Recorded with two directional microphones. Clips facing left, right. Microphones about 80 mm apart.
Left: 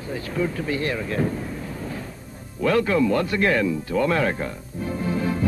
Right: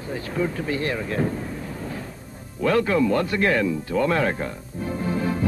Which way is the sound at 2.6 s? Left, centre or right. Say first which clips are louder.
Even; right.